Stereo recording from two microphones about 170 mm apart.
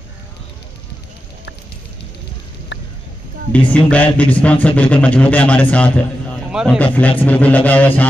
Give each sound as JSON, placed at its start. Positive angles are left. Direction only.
{"t": 2.7, "sound": "a sound", "side_deg": 90}
{"t": 3.7, "sound": "speech", "side_deg": 10}
{"t": 6.5, "sound": "speech", "side_deg": 0}
{"t": 6.8, "sound": "speech", "side_deg": 10}